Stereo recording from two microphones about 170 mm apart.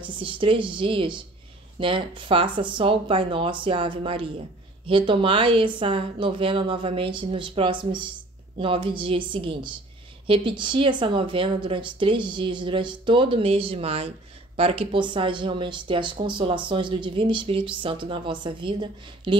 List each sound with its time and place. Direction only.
0.0 s speech: 30° right (ahead or behind)